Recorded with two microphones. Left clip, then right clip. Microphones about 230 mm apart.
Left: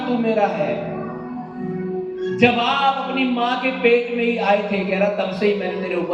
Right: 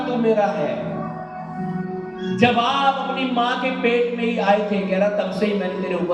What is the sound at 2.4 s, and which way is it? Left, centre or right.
Speech, right.